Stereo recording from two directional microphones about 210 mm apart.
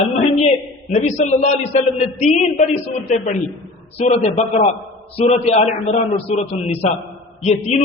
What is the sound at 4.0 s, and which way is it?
A man's voice, 30° left (ahead or behind).